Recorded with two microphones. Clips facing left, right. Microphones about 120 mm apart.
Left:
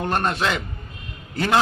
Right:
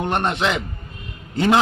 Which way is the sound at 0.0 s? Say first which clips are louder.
Right 1 dB; 20° right (ahead or behind).